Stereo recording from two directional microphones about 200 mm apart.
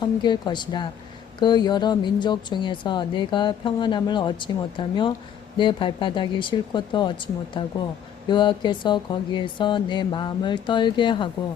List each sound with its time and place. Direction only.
0.0 s a woman's voice: 20° left (ahead or behind)